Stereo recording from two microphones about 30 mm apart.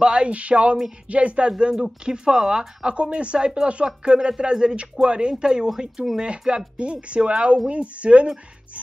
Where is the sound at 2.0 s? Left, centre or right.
Right.